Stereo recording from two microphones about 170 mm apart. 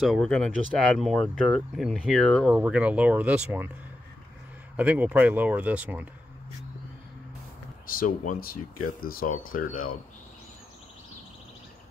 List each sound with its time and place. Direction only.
0.0 s speech: 5° left (ahead or behind)
2.5 s speech: 5° right (ahead or behind)
4.7 s speech: 10° right (ahead or behind)
7.8 s speech: 55° left (ahead or behind)